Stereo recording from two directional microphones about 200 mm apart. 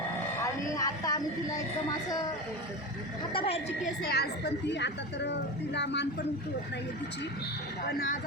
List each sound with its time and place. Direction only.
0.7 s a sound: 20° left (ahead or behind)
3.3 s a woman's voice: 30° left (ahead or behind)
4.0 s a woman's voice: 50° left (ahead or behind)